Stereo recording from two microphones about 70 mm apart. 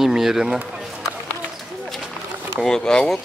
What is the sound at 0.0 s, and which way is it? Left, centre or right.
Speech, centre.